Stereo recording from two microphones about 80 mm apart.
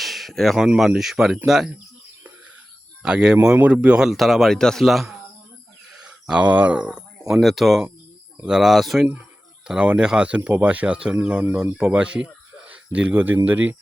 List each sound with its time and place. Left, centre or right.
0.0 s a sound: centre
0.8 s a man's voice: centre
3.0 s a man's voice: centre
9.6 s speech: centre